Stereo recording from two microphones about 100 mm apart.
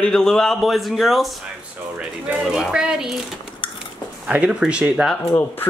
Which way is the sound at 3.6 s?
55° left (ahead or behind).